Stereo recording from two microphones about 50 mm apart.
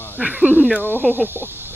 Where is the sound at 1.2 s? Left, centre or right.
Right.